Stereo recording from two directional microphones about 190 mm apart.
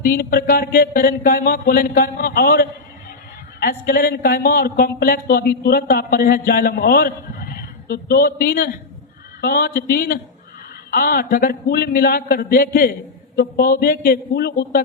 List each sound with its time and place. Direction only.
0.0 s speech: 50° left (ahead or behind)